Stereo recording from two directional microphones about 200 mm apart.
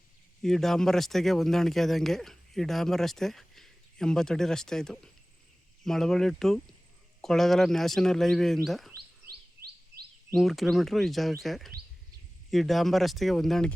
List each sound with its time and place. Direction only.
0.4 s speech: centre (ahead or behind)
10.3 s speech: centre (ahead or behind)